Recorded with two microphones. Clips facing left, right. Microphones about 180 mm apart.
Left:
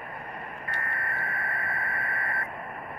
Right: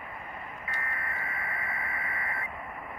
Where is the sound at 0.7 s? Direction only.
60° left (ahead or behind).